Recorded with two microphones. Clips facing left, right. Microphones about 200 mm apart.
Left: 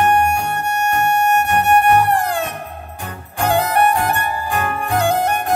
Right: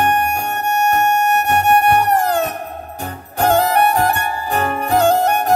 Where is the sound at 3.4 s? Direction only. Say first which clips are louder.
Right 2 dB; 40° right (ahead or behind).